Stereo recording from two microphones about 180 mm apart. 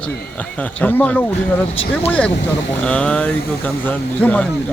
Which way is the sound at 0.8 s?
10° left (ahead or behind).